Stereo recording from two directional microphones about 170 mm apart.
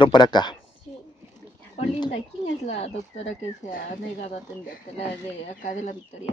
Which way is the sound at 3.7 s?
55° left (ahead or behind).